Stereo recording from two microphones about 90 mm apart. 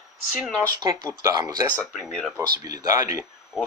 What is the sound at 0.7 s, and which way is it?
Speech, 45° right (ahead or behind).